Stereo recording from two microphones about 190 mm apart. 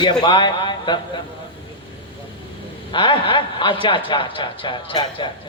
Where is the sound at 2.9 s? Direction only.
25° left (ahead or behind).